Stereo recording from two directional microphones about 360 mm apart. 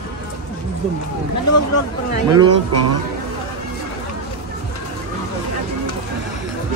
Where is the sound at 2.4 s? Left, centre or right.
Right.